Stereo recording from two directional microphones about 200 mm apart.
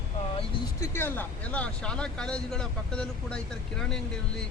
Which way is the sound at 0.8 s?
10° left (ahead or behind).